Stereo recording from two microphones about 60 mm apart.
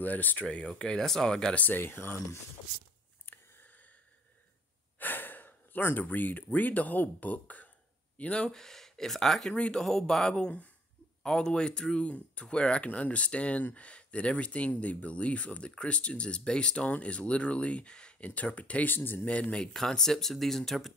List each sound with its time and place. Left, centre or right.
0.0 s speech: left
0.7 s speech: centre
1.5 s speech: left
1.8 s speech: left
3.3 s a sound: left
4.9 s snort: left
5.9 s speech: left
8.5 s speech: centre; by 19.2 s left
19.2 s speech: left
19.7 s speech: centre